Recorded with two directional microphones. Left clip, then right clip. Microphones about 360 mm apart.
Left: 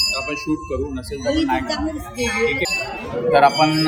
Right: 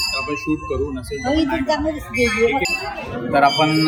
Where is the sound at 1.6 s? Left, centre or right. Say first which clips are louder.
Right 4 dB; centre.